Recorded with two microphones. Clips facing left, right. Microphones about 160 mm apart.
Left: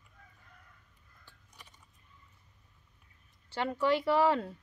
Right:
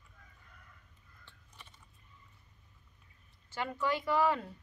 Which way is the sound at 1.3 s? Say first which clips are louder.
Even; 15° left (ahead or behind).